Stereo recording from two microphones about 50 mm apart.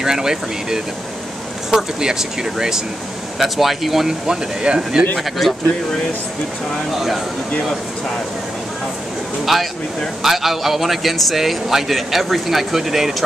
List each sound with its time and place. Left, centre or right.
0.0 s a man's voice: centre
4.3 s speech: centre
5.1 s a man's voice: centre
9.5 s a man's voice: centre